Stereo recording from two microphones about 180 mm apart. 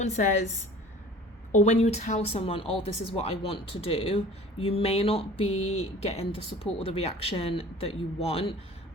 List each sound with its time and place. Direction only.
0.0 s speech: 40° left (ahead or behind)
1.5 s speech: 40° left (ahead or behind)